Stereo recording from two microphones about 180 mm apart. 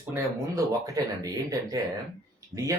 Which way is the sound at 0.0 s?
15° right (ahead or behind).